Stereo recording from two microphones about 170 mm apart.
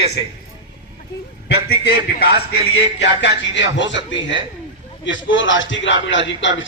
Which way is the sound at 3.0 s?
90° left.